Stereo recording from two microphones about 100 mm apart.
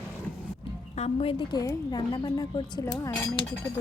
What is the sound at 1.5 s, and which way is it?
Speech, 45° left (ahead or behind).